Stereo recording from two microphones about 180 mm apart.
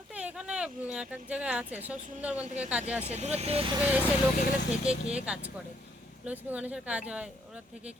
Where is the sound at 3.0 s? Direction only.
40° right (ahead or behind).